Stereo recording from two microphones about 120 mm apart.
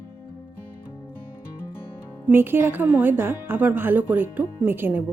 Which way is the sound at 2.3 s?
20° right (ahead or behind).